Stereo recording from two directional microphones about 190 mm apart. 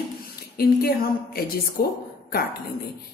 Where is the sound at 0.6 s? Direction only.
55° left (ahead or behind).